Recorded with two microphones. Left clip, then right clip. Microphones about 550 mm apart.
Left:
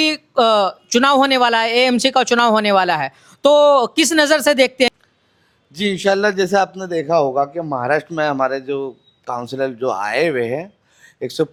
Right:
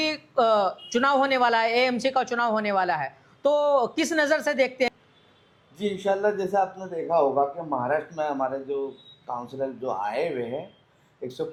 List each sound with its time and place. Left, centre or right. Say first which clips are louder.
0.0 s speech: left 8 dB; centre
5.7 s a man's voice: left 9 dB; left